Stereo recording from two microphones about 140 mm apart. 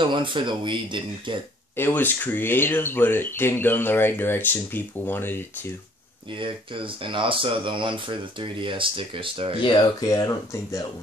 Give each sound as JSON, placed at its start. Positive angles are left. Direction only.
{"t": 0.0, "sound": "speech", "side_deg": -35}
{"t": 1.8, "sound": "speech", "side_deg": 15}
{"t": 6.3, "sound": "speech", "side_deg": -35}
{"t": 9.6, "sound": "speech", "side_deg": 35}